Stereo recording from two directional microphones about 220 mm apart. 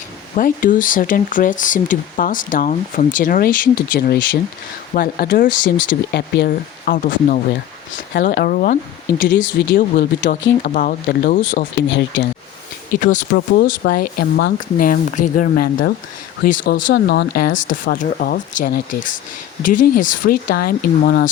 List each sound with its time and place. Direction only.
0.3 s speech: 40° left (ahead or behind)
8.4 s speech: 40° left (ahead or behind)
11.9 s speech: 55° left (ahead or behind)
12.9 s speech: 35° left (ahead or behind)
16.8 s speech: 50° left (ahead or behind)